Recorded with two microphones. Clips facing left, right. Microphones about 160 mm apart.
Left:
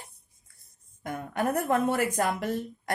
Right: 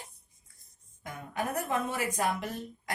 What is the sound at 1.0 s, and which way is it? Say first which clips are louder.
A woman's voice: left 6 dB; 60° left (ahead or behind).